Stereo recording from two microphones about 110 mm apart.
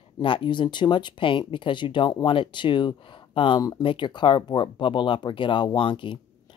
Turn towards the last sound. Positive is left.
turn(degrees=50)  # may be behind; listen again after turning